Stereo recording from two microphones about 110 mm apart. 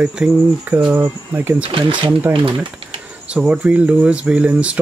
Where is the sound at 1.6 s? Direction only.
50° right (ahead or behind).